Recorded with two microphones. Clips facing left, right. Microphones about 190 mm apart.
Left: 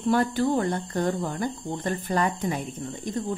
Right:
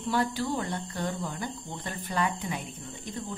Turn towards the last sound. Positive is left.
turn(degrees=45)  # may be behind; listen again after turning